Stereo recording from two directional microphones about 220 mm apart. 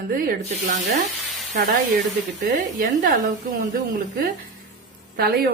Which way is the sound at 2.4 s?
40° right (ahead or behind).